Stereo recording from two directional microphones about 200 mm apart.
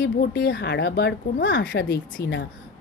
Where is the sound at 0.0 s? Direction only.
55° left (ahead or behind).